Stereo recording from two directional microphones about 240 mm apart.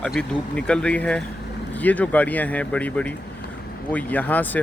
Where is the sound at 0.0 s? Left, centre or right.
Centre.